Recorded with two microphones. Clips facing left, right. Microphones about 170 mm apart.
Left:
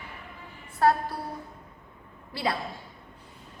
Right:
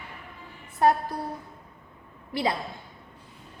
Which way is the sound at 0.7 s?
20° right (ahead or behind).